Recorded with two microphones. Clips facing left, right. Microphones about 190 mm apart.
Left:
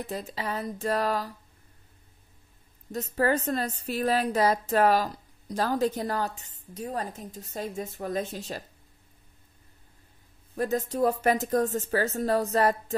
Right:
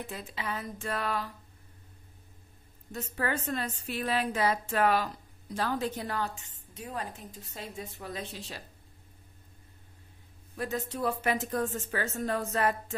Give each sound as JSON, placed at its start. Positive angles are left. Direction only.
{"t": 0.0, "sound": "a woman's voice", "side_deg": 40}
{"t": 2.9, "sound": "a woman's voice", "side_deg": 40}
{"t": 10.5, "sound": "a woman's voice", "side_deg": 40}